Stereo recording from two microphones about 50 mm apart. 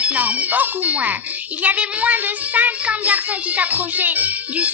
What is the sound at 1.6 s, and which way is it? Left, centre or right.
Speech, right.